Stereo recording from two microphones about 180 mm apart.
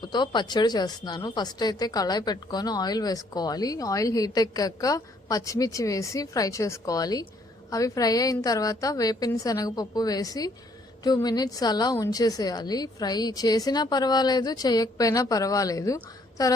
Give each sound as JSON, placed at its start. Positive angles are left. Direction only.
{"t": 0.0, "sound": "speech", "side_deg": 25}